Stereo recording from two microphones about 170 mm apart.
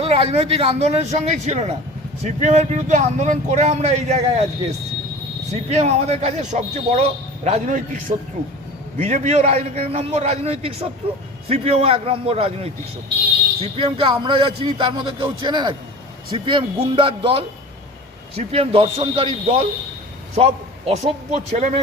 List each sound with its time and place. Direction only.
0.0 s a man's voice: 35° right (ahead or behind)
5.7 s a man's voice: 40° right (ahead or behind)